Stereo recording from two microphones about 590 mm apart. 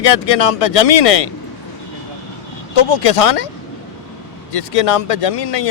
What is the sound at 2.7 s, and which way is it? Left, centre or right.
Speech, left.